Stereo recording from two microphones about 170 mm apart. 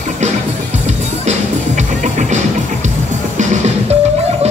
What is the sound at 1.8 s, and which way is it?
Music, 45° right (ahead or behind).